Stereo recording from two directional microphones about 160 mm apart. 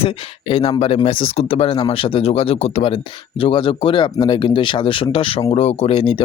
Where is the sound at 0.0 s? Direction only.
35° left (ahead or behind).